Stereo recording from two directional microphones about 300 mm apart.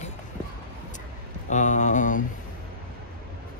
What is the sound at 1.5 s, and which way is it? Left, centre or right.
Speech, left.